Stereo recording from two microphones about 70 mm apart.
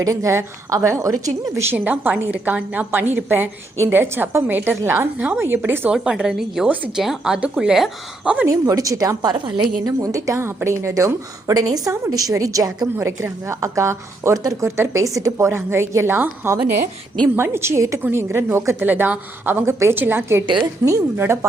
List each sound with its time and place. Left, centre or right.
0.0 s a woman's voice: right
1.6 s a woman's voice: right
5.9 s speech: centre
8.4 s a woman's voice: right
13.0 s a woman's voice: right
16.1 s a woman's voice: right
18.8 s a woman's voice: right
20.8 s a woman's voice: right